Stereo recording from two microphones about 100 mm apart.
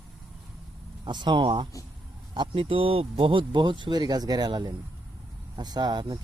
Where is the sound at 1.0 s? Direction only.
50° right (ahead or behind).